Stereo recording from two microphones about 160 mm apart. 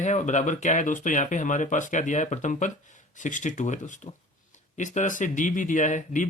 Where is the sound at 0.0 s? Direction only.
50° left (ahead or behind).